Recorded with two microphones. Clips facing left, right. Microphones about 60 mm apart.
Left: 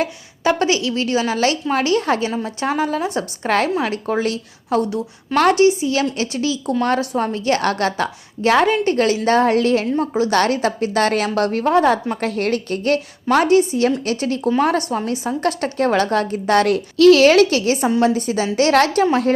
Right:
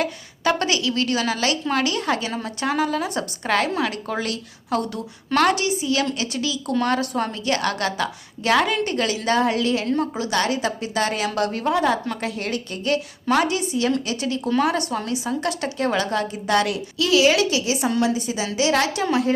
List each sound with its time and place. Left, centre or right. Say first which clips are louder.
0.0 s a woman's voice: left 3 dB; left